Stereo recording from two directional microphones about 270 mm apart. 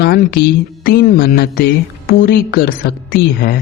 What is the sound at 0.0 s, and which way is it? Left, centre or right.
Speech, left.